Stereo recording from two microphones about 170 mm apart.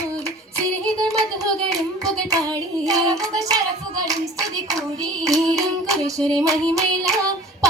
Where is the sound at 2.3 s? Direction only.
20° right (ahead or behind).